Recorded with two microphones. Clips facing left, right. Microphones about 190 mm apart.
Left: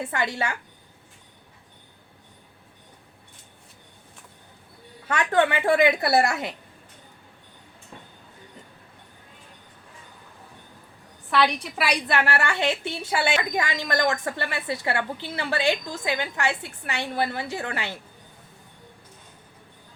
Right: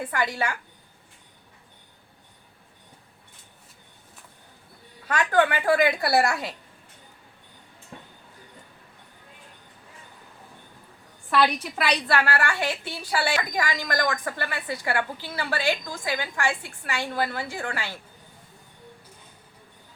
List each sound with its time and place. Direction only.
0.0 s a woman's voice: 25° left (ahead or behind)
5.0 s a woman's voice: 25° left (ahead or behind)
11.3 s a woman's voice: centre (ahead or behind)
11.9 s a woman's voice: 15° left (ahead or behind)